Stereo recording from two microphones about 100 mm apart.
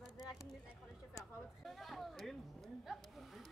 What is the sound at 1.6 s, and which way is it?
Speech, centre (ahead or behind).